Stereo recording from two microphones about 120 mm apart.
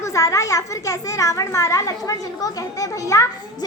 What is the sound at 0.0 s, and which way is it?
A child's voice, 25° left (ahead or behind).